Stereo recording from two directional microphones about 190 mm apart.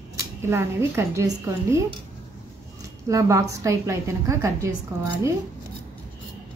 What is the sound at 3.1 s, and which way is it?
A woman's voice, 15° right (ahead or behind).